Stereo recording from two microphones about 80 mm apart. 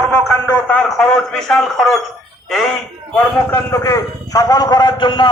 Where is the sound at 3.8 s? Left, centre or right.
Left.